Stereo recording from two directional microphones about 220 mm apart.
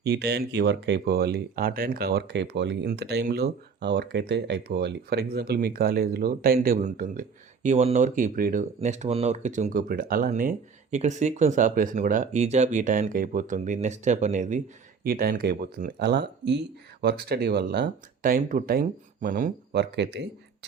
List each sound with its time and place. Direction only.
0.0 s speech: 50° right (ahead or behind)